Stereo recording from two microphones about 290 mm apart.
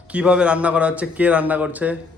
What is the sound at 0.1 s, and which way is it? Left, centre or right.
Speech, centre.